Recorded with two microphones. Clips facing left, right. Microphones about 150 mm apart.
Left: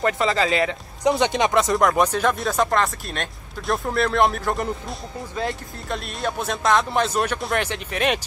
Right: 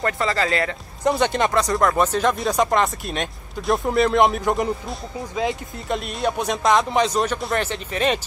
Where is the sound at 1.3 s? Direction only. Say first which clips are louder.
Left 1 dB; 15° left (ahead or behind).